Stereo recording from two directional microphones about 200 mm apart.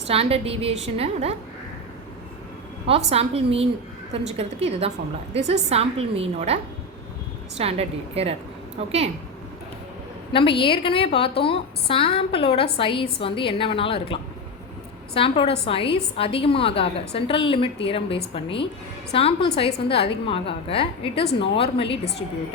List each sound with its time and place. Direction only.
0.1 s a woman's voice: 30° right (ahead or behind)
2.8 s a woman's voice: 30° right (ahead or behind)
7.6 s a woman's voice: 30° right (ahead or behind)
10.3 s a woman's voice: 25° left (ahead or behind)